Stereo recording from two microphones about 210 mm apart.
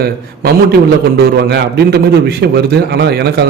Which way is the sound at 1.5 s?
50° right (ahead or behind).